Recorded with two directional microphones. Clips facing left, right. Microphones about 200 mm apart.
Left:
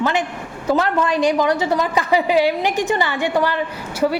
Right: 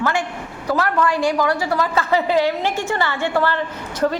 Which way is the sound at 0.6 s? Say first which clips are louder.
Left 1 dB; 20° left (ahead or behind).